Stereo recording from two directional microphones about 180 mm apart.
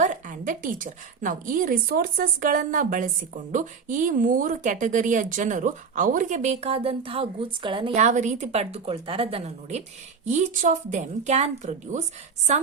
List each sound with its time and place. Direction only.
0.0 s a woman's voice: 45° right (ahead or behind); by 7.9 s 25° right (ahead or behind)
7.9 s a woman's voice: 40° right (ahead or behind)